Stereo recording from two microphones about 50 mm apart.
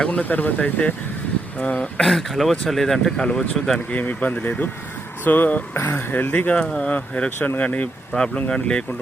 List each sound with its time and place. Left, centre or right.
0.0 s speech: left
2.0 s speech: centre
3.8 s speech: left
6.3 s speech: left
7.3 s speech: left
7.6 s speech: left
8.1 s speech: left